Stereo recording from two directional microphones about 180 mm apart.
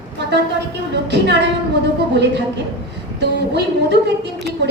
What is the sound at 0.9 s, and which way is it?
A woman's voice, 75° right (ahead or behind).